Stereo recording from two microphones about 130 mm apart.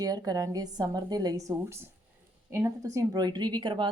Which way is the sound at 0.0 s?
30° right (ahead or behind).